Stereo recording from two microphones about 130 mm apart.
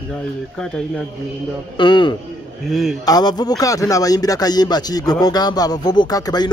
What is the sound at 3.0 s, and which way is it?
Speech, 30° left (ahead or behind).